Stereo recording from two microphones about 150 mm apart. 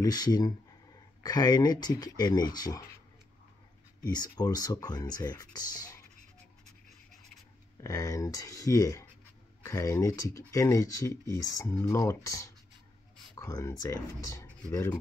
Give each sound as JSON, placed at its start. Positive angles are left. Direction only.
{"t": 0.0, "sound": "speech", "side_deg": 25}
{"t": 4.0, "sound": "speech", "side_deg": 25}
{"t": 7.8, "sound": "speech", "side_deg": 20}